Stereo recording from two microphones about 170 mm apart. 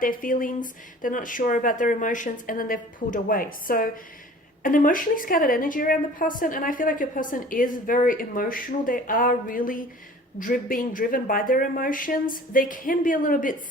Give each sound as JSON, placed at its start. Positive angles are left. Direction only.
{"t": 0.0, "sound": "a woman's voice", "side_deg": 55}